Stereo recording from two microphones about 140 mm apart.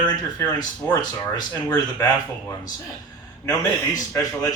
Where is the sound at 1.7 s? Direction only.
30° left (ahead or behind).